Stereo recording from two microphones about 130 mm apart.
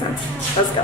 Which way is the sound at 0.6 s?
45° left (ahead or behind).